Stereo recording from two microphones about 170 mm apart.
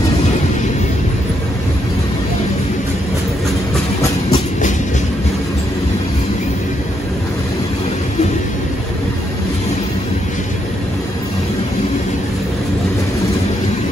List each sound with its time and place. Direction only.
4.3 s train: 45° left (ahead or behind)